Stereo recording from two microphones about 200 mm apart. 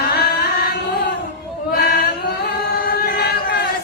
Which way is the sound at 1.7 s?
50° left (ahead or behind).